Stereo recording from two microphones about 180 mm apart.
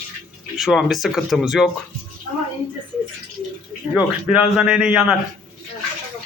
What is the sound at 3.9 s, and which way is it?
Speech, 5° right (ahead or behind).